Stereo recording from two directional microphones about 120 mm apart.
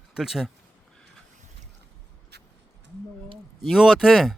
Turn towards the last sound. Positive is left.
turn(degrees=0)  # may be behind; listen again after turning